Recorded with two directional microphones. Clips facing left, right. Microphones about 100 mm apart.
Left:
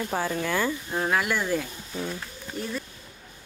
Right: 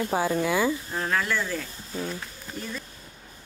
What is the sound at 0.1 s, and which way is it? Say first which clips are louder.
Speech: right 3 dB; 10° right (ahead or behind).